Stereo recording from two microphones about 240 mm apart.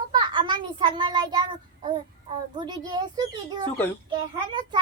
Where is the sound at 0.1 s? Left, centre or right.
Centre.